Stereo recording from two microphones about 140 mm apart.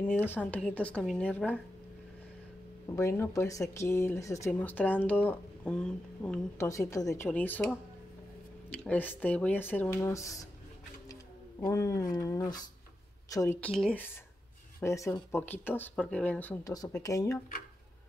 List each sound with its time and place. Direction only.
0.0 s speech: 15° left (ahead or behind)
2.9 s speech: 20° left (ahead or behind)
6.6 s speech: 20° left (ahead or behind)
7.2 s speech: 10° left (ahead or behind)
11.6 s speech: 25° left (ahead or behind)
13.3 s speech: 25° left (ahead or behind)
13.6 s speech: 10° left (ahead or behind)
14.8 s speech: 20° left (ahead or behind)
16.6 s speech: 25° left (ahead or behind)